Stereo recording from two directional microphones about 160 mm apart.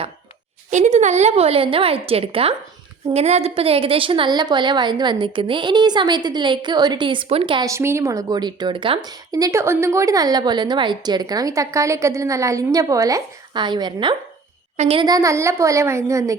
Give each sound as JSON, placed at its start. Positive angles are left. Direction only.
{"t": 0.7, "sound": "a woman's voice", "side_deg": -45}
{"t": 7.7, "sound": "a woman's voice", "side_deg": -15}
{"t": 15.0, "sound": "speech", "side_deg": -20}